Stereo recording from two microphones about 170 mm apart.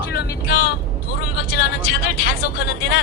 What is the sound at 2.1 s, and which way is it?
Speech, 60° left (ahead or behind).